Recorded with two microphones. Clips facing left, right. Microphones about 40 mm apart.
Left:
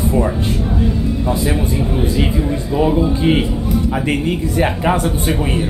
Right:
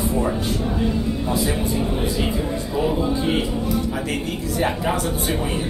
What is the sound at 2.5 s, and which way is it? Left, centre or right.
Speech, left.